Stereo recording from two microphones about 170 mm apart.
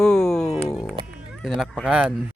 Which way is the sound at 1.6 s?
5° right (ahead or behind).